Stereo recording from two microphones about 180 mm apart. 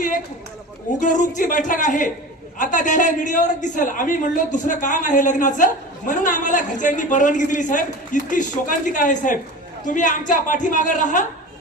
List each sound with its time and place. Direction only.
0.9 s a man's voice: 45° left (ahead or behind)